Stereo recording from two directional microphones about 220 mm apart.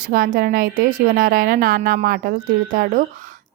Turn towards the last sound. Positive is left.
turn(degrees=-40)  # may be behind; listen again after turning